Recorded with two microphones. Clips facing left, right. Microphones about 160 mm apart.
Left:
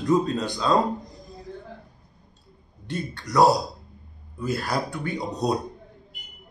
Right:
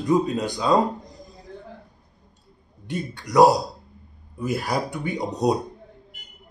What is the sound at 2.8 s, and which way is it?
A man's voice, 15° right (ahead or behind).